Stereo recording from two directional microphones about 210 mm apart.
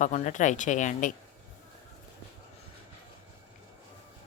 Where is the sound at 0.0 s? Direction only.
35° left (ahead or behind).